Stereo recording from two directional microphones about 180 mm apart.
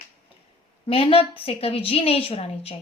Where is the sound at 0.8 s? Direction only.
30° left (ahead or behind).